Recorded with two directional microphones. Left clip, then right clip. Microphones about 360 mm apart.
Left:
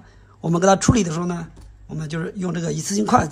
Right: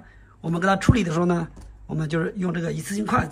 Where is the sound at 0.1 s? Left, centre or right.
Centre.